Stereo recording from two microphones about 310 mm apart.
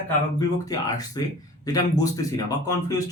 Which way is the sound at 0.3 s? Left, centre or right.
Centre.